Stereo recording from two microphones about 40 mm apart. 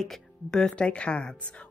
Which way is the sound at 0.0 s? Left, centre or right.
Centre.